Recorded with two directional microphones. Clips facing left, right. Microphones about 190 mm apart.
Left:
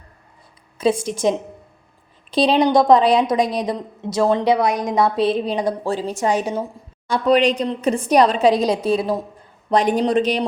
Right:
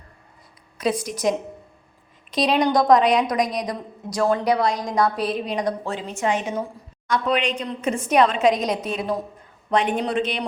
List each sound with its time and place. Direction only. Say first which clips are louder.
0.8 s a woman's voice: left 5 dB; 25° left (ahead or behind)